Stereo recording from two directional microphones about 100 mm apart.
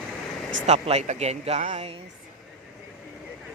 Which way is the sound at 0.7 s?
90° right.